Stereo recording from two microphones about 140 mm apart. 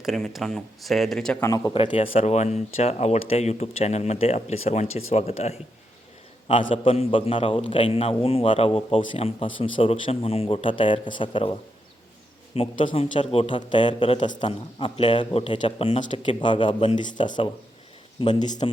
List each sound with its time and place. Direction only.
0.0 s speech: centre (ahead or behind)
1.4 s speech: 25° left (ahead or behind)
1.7 s speech: 40° left (ahead or behind)
6.8 s speech: 45° left (ahead or behind)
12.8 s speech: 40° left (ahead or behind)